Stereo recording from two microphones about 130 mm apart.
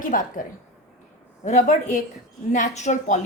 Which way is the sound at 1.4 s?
70° left (ahead or behind).